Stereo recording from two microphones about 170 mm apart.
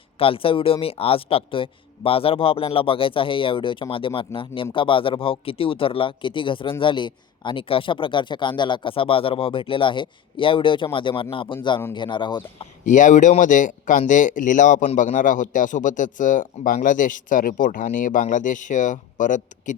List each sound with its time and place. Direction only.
0.2 s speech: 30° left (ahead or behind)
12.8 s a man's voice: 50° left (ahead or behind)